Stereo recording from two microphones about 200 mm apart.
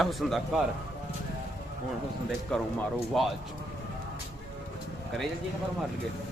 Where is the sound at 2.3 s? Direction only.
5° left (ahead or behind).